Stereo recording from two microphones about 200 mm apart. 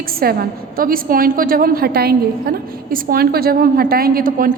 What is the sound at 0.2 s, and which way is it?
A woman's voice, 50° right (ahead or behind).